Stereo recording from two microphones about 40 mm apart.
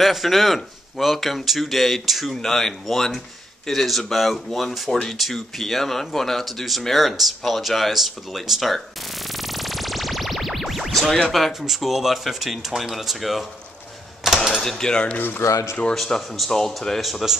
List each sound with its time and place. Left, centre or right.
0.0 s speech: centre
9.3 s music: centre
11.3 s speech: centre
14.2 s typewriter: centre
14.6 s speech: centre
14.9 s speech: left
15.1 s speech: left
15.9 s speech: centre
16.4 s speech: centre
17.0 s speech: centre